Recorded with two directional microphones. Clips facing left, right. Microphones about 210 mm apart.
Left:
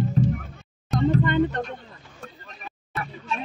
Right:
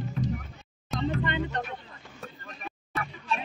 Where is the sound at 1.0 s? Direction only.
50° left (ahead or behind).